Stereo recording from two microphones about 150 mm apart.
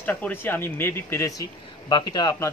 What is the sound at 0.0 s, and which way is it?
A man's voice, 10° left (ahead or behind).